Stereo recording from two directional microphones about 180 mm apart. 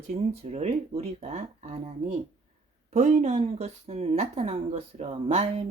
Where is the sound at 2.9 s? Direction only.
40° right (ahead or behind).